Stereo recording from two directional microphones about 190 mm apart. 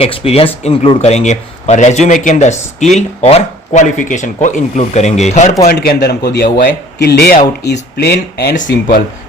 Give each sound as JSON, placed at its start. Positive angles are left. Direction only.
{"t": 0.0, "sound": "speech", "side_deg": 30}
{"t": 5.6, "sound": "a man's voice", "side_deg": 55}